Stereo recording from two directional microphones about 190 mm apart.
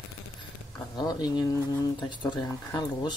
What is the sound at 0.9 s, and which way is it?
Speech, 20° left (ahead or behind).